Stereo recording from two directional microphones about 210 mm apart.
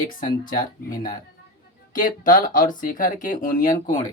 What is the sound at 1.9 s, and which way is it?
Speech, 40° left (ahead or behind).